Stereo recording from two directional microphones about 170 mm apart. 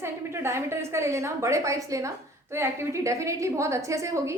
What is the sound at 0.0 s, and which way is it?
A woman's voice, 15° right (ahead or behind).